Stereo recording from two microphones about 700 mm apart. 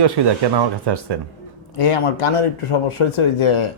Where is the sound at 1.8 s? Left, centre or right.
Left.